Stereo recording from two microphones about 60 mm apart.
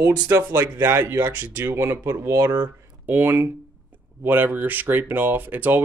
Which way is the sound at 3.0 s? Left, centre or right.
Right.